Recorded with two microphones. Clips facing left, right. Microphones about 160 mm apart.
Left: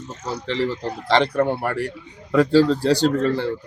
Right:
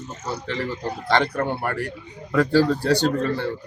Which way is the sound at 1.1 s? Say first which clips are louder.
Left 3 dB; 25° left (ahead or behind).